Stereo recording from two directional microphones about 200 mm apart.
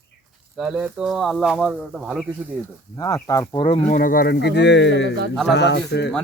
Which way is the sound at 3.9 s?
45° left (ahead or behind).